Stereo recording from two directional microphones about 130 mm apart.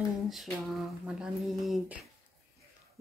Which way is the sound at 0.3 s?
Centre (ahead or behind).